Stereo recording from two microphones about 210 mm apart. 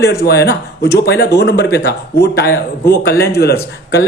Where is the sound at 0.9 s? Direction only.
50° left (ahead or behind).